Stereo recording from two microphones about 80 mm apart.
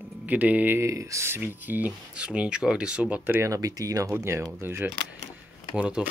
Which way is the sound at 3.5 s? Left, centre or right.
Right.